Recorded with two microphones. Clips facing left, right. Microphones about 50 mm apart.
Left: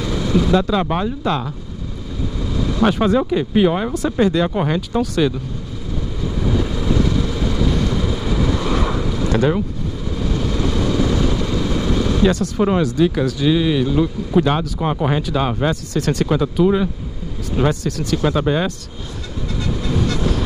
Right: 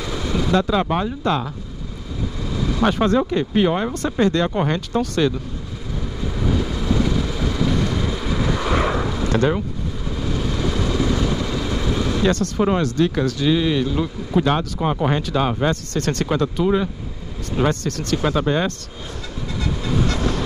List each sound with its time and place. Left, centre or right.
0.0 s speech: centre
2.6 s speech: centre
6.4 s vehicle: centre
8.7 s vehicle: right
9.1 s vehicle: centre
11.1 s speech: centre